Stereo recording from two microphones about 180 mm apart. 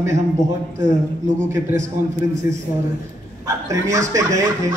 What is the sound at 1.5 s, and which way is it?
Speech, 15° right (ahead or behind).